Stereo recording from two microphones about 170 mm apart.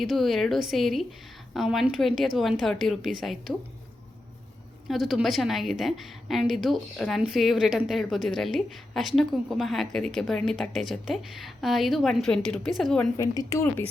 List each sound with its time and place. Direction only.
0.0 s a woman's voice: centre (ahead or behind)
4.9 s a woman's voice: centre (ahead or behind)
13.3 s a woman's voice: 20° left (ahead or behind)